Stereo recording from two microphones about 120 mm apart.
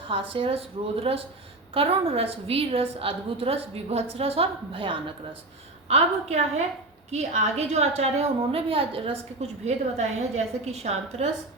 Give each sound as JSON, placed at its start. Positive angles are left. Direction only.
{"t": 0.1, "sound": "a woman's voice", "side_deg": -45}
{"t": 5.9, "sound": "a woman's voice", "side_deg": -60}